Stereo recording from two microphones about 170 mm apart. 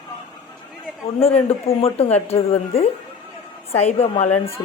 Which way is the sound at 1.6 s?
35° left (ahead or behind).